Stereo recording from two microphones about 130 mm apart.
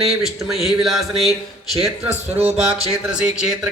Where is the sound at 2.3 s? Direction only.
10° right (ahead or behind).